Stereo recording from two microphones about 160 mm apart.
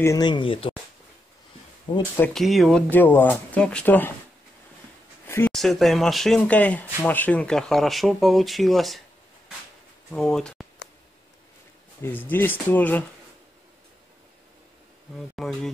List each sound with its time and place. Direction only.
0.0 s speech: 25° left (ahead or behind)
2.1 s speech: 5° left (ahead or behind)
5.2 s a sound: 15° left (ahead or behind)
5.5 s speech: centre (ahead or behind)
10.1 s speech: 5° left (ahead or behind)
12.0 s speech: 10° left (ahead or behind)
15.1 s speech: centre (ahead or behind)